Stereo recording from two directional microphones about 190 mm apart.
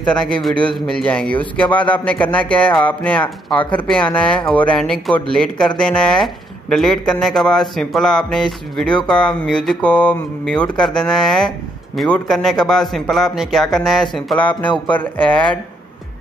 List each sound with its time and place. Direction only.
0.0 s speech: 5° left (ahead or behind)